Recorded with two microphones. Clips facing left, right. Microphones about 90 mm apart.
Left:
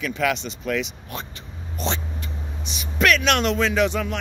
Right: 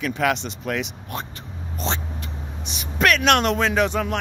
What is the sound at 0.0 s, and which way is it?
Speech, 50° right (ahead or behind).